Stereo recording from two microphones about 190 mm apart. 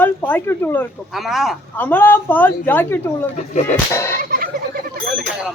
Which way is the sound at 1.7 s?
10° left (ahead or behind).